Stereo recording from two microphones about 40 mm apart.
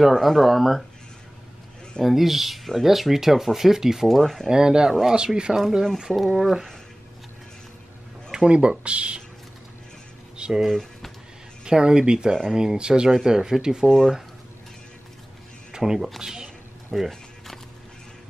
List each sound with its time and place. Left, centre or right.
0.1 s speech: centre
2.0 s speech: centre
4.1 s speech: centre
4.5 s speech: centre
6.1 s speech: left
6.4 s speech: centre
8.5 s speech: right
10.3 s a sound: right
10.7 s speech: centre
11.6 s speech: centre
13.8 s speech: centre
15.7 s a sound: centre
16.2 s speech: centre
16.9 s speech: centre